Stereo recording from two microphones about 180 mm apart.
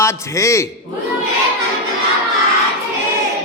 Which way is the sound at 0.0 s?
15° left (ahead or behind).